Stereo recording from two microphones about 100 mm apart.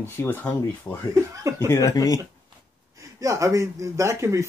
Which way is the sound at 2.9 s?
35° right (ahead or behind).